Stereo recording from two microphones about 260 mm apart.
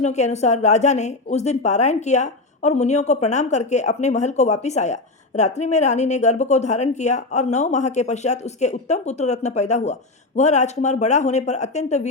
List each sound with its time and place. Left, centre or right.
0.0 s a woman's voice: left